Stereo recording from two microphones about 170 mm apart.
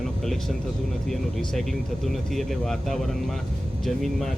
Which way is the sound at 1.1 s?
Centre (ahead or behind).